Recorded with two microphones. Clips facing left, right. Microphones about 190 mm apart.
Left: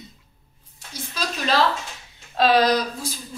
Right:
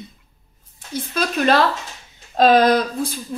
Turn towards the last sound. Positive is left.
turn(degrees=-55)  # may be behind; listen again after turning